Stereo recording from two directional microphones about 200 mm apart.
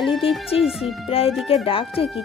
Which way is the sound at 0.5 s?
30° left (ahead or behind).